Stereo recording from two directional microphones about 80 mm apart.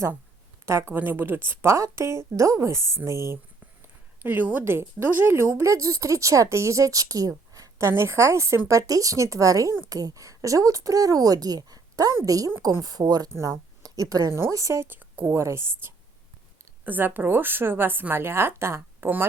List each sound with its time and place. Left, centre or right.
0.6 s speech: right
4.2 s speech: right
7.9 s a woman's voice: right
13.3 s speech: right
14.3 s speech: right
14.8 s speech: right